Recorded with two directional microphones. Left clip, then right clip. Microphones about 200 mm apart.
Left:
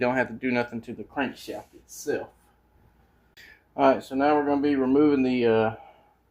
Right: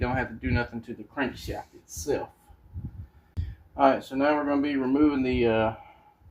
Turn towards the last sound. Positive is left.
turn(degrees=45)  # may be behind; listen again after turning